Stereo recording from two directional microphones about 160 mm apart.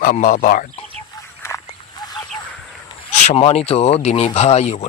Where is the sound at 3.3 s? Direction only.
40° left (ahead or behind).